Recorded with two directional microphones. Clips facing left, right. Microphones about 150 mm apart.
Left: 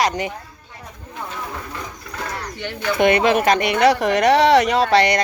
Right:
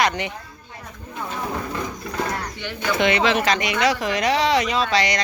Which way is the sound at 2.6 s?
50° left (ahead or behind).